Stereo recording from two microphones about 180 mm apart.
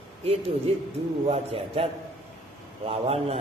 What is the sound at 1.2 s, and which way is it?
A man's voice, 30° right (ahead or behind).